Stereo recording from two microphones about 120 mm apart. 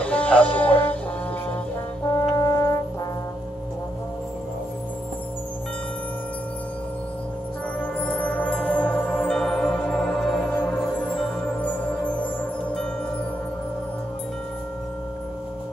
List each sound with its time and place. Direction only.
0.0 s music: 10° left (ahead or behind)
2.1 s brass instrument: 30° left (ahead or behind)
7.8 s music: 10° left (ahead or behind)